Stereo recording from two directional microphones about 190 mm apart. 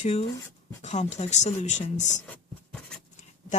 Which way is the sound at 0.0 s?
30° left (ahead or behind).